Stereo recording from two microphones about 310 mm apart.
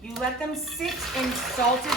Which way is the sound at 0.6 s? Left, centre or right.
Centre.